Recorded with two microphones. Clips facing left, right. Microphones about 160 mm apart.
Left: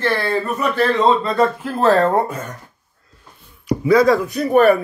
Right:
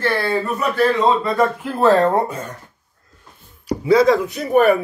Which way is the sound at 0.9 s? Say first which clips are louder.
Left 1 dB; 10° right (ahead or behind).